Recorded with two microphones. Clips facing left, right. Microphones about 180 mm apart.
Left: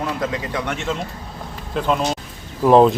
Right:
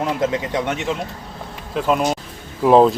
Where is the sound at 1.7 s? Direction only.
10° right (ahead or behind).